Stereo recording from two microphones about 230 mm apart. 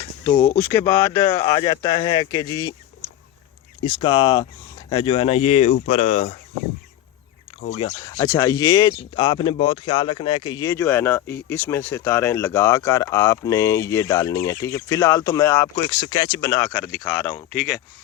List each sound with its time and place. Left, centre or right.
0.3 s speech: centre
3.8 s speech: left
7.7 s speech: left